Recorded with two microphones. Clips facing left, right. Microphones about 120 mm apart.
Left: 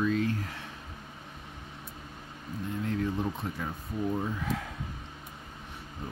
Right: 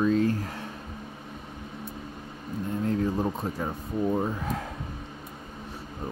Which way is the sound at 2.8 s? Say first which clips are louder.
Right 4 dB; 35° right (ahead or behind).